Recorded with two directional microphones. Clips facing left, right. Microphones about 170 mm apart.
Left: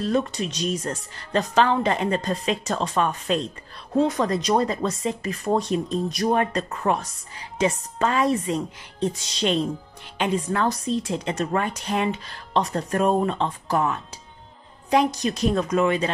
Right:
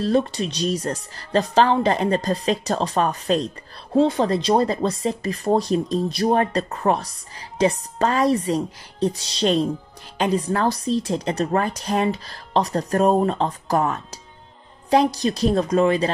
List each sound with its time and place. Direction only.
0.0 s speech: 35° right (ahead or behind)